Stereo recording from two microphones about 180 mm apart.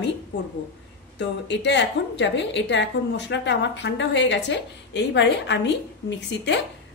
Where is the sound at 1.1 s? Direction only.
75° left (ahead or behind).